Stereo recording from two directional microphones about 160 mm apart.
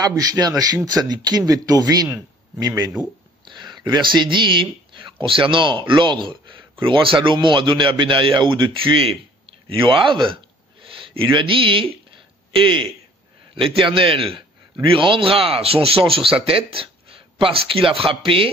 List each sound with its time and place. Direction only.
0.0 s speech: 25° right (ahead or behind)
2.0 s a man's voice: 10° right (ahead or behind)
3.4 s a man's voice: 30° right (ahead or behind)